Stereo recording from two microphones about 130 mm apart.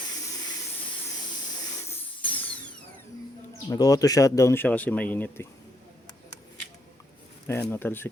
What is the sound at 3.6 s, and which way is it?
Speech, 30° left (ahead or behind).